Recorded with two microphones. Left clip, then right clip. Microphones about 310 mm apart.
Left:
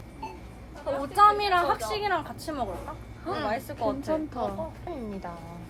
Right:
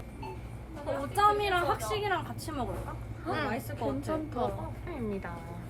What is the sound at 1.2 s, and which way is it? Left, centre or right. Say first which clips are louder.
A woman's voice: left 6 dB; left.